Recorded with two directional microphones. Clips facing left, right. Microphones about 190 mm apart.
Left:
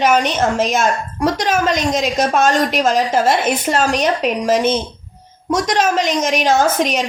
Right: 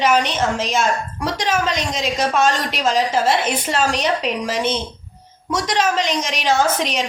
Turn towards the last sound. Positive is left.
turn(degrees=45)  # may be behind; listen again after turning